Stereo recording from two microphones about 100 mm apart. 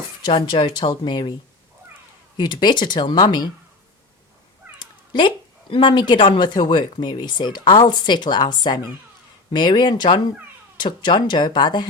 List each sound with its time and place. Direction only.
0.3 s speech: 55° left (ahead or behind)
2.4 s speech: 50° left (ahead or behind)
4.8 s speech: 55° left (ahead or behind)